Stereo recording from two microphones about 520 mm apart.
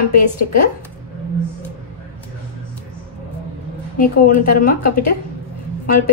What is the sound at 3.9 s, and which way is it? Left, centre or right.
A woman's voice, centre.